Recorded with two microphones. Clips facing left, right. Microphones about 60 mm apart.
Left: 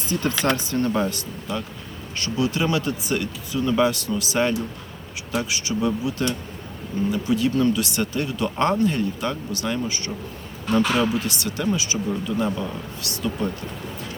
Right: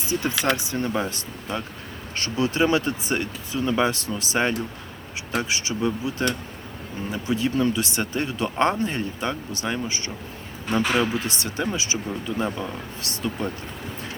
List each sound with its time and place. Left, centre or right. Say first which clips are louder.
0.1 s speech: left 1 dB; centre
1.1 s speech: left 1 dB; right
10.7 s speech: left 2 dB; centre
11.1 s speech: left 2 dB; right
13.0 s speech: left 2 dB; right